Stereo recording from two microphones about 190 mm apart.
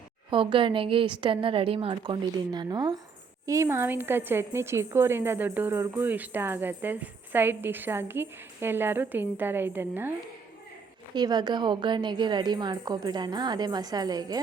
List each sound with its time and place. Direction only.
0.3 s a woman's voice: 25° right (ahead or behind)
11.1 s a woman's voice: 20° right (ahead or behind)